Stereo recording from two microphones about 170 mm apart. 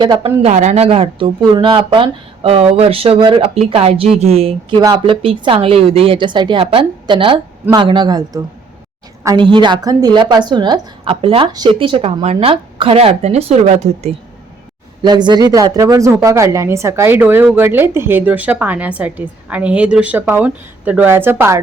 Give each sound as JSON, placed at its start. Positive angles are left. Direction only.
{"t": 0.0, "sound": "a man's voice", "side_deg": -25}
{"t": 0.4, "sound": "a woman's voice", "side_deg": -40}
{"t": 4.8, "sound": "a man's voice", "side_deg": -20}
{"t": 15.0, "sound": "speech", "side_deg": -25}